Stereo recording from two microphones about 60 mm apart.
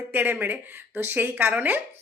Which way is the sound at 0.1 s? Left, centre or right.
Right.